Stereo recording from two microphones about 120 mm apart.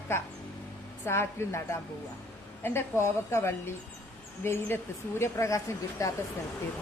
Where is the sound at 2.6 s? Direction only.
20° left (ahead or behind).